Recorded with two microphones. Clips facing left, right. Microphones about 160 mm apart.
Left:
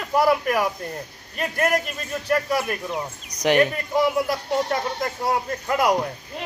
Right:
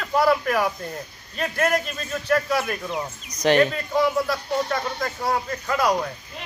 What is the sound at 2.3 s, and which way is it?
Speech, 10° left (ahead or behind).